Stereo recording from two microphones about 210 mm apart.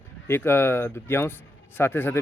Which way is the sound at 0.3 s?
10° left (ahead or behind).